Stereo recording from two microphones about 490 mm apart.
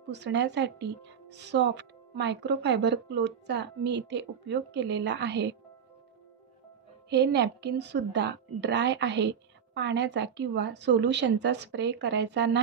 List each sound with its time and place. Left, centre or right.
0.1 s speech: right
7.1 s speech: right